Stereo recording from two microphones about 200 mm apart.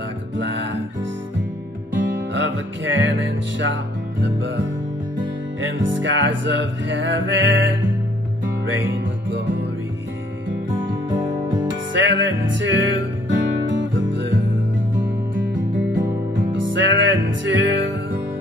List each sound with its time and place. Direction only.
0.4 s music: 65° right (ahead or behind)
2.0 s music: 65° right (ahead or behind)
5.1 s music: 70° right (ahead or behind)
8.8 s music: 65° right (ahead or behind)
11.5 s music: 65° right (ahead or behind)